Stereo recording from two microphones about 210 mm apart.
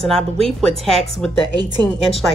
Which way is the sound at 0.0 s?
Centre (ahead or behind).